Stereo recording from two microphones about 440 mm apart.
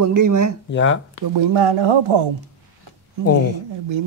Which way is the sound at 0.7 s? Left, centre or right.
Left.